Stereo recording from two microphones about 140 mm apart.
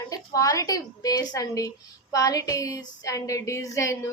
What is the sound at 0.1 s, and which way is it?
A woman's voice, 25° left (ahead or behind).